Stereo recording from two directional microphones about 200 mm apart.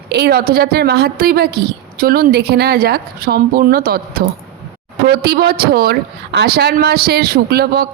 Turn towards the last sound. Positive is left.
turn(degrees=-50)  # may be behind; listen again after turning